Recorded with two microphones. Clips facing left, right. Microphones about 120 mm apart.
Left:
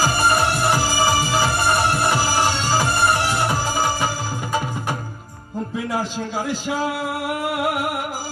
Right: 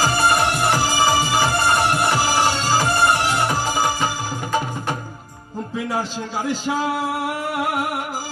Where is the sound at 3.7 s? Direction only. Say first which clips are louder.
Right 1 dB; 15° right (ahead or behind).